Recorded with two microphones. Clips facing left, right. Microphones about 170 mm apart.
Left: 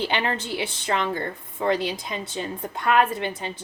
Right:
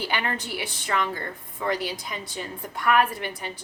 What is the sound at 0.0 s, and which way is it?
A woman's voice, 25° left (ahead or behind).